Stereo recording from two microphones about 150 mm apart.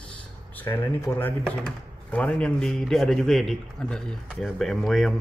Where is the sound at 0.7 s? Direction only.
15° left (ahead or behind).